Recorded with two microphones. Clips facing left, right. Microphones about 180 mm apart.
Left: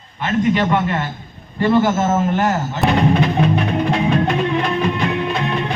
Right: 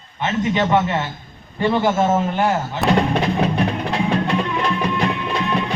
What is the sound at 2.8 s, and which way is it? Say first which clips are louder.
Speech: left 1 dB; centre (ahead or behind).